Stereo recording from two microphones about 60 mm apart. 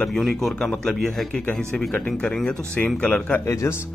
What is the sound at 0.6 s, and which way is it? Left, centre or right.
Speech, centre.